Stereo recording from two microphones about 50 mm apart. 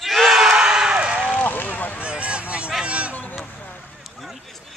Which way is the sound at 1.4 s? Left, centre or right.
Left.